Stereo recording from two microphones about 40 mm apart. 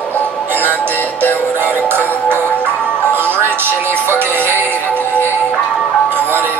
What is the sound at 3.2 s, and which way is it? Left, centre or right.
Music, right.